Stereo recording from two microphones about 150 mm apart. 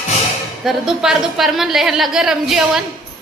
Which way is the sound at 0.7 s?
5° right (ahead or behind).